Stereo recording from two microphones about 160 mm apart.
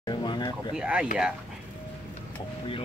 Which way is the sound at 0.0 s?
25° left (ahead or behind).